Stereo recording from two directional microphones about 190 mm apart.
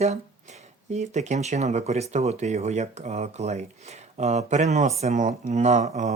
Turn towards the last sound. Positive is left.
turn(degrees=-40)  # may be behind; listen again after turning